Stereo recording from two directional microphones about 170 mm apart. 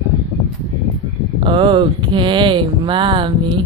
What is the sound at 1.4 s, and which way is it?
Speech, 30° right (ahead or behind).